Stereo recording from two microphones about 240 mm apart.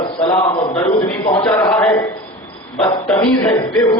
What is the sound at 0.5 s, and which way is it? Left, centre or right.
Speech, left.